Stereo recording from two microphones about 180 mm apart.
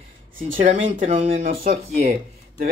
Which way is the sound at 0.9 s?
35° right (ahead or behind).